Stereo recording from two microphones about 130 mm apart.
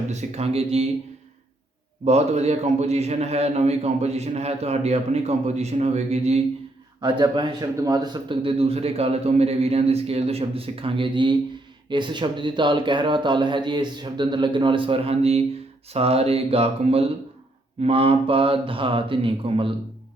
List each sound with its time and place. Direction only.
0.1 s a man's voice: 60° right (ahead or behind)
2.0 s a man's voice: 55° right (ahead or behind)
7.0 s a man's voice: 35° right (ahead or behind)